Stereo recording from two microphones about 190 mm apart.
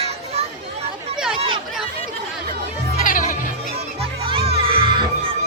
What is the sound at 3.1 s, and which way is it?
Music, 45° left (ahead or behind).